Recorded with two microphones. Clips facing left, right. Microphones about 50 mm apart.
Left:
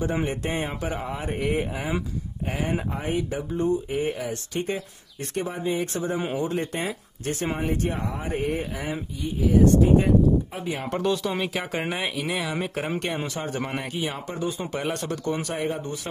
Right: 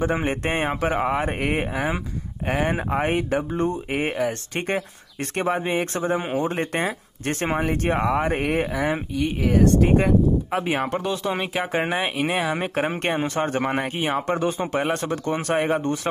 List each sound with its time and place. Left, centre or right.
0.0 s speech: right
8.0 s speech: right
10.9 s speech: centre
12.0 s speech: right
15.5 s speech: right